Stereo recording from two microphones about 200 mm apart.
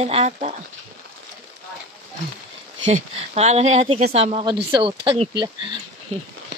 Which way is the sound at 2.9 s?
35° right (ahead or behind).